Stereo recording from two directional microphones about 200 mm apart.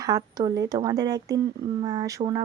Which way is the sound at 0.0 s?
20° right (ahead or behind).